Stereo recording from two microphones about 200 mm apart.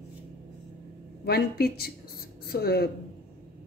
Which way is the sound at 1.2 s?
50° left (ahead or behind).